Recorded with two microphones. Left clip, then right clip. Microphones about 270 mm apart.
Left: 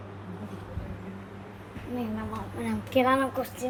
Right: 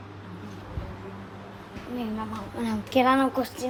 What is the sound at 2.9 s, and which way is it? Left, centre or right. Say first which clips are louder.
Speech: right 2 dB; centre.